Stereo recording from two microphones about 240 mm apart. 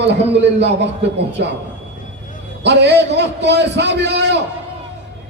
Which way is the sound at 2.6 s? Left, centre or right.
Right.